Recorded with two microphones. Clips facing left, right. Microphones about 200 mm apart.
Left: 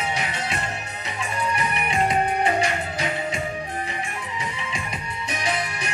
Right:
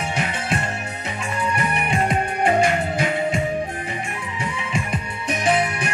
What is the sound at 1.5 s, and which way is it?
Music, 50° right (ahead or behind).